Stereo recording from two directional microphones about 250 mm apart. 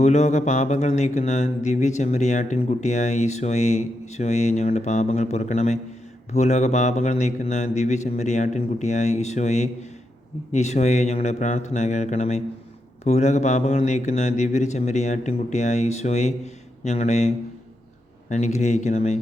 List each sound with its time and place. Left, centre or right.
0.0 s speech: left